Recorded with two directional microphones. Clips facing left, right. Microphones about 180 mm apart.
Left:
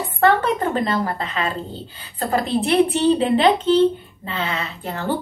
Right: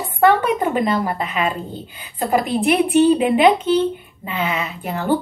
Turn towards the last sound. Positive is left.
turn(degrees=-15)  # may be behind; listen again after turning